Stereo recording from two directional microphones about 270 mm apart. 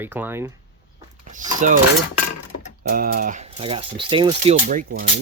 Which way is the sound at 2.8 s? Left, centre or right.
Right.